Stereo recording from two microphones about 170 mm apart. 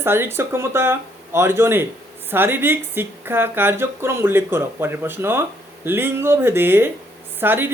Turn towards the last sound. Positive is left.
turn(degrees=-10)  # may be behind; listen again after turning